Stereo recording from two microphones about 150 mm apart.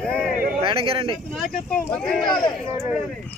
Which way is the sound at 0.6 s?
35° right (ahead or behind).